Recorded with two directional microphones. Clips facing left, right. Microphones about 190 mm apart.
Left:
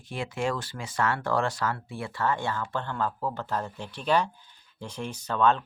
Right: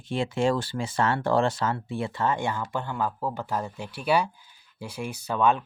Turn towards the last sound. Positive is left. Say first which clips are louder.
# right 1 dB
turn(degrees=-10)  # may be behind; listen again after turning